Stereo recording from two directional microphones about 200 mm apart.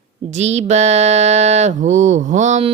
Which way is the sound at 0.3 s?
35° right (ahead or behind).